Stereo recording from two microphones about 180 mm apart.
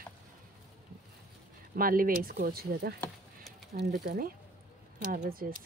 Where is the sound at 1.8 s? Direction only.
50° right (ahead or behind).